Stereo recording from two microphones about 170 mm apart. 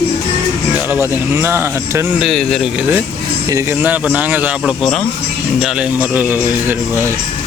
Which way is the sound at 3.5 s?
15° right (ahead or behind).